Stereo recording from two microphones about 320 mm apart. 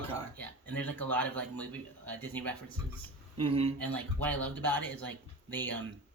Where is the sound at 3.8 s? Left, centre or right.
Centre.